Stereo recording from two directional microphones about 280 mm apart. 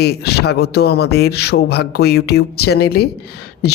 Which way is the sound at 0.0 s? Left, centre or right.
Left.